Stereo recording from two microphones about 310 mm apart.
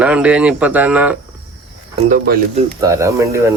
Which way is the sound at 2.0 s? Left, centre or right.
Right.